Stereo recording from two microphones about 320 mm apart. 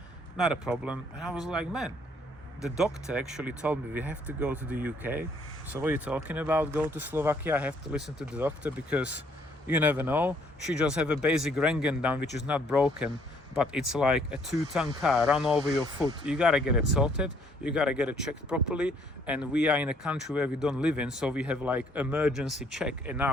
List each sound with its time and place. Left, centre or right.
0.3 s speech: centre
12.2 s speech: left
12.5 s speech: centre